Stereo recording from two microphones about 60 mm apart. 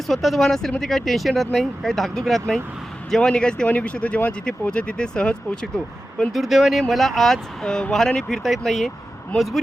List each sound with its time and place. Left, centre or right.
0.1 s speech: centre
3.1 s speech: centre
6.3 s speech: centre